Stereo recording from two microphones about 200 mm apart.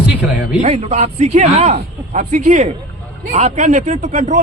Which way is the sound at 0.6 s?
35° right (ahead or behind).